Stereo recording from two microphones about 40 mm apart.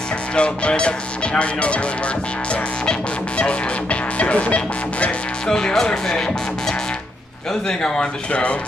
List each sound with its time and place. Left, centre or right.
0.4 s music: left
5.5 s speech: centre
7.6 s music: left